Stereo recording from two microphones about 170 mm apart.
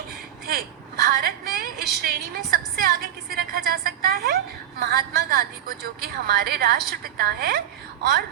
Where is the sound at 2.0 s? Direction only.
65° right (ahead or behind).